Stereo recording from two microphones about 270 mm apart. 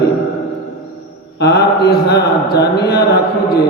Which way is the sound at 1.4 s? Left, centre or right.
Left.